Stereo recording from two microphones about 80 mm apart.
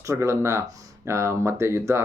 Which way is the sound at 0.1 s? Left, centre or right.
Right.